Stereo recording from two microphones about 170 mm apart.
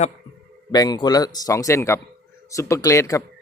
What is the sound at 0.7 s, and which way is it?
Speech, 25° left (ahead or behind).